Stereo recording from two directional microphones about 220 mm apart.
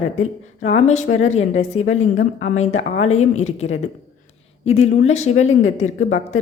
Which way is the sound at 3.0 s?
30° left (ahead or behind).